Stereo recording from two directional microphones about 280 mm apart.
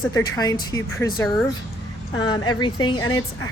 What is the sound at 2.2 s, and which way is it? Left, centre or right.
Speech, centre.